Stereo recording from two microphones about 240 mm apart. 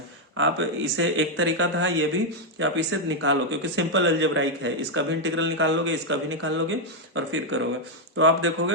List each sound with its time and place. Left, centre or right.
0.3 s speech: right